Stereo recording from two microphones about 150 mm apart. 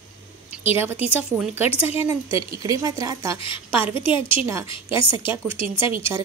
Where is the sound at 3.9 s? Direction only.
35° left (ahead or behind).